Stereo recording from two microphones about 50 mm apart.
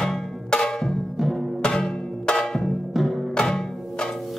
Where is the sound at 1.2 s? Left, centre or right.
Centre.